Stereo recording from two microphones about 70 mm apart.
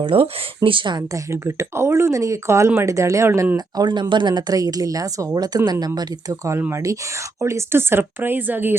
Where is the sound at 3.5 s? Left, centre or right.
Right.